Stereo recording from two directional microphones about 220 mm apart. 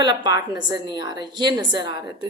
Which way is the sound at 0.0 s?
20° right (ahead or behind).